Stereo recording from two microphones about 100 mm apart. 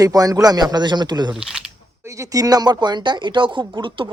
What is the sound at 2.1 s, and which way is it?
Speech, 35° right (ahead or behind).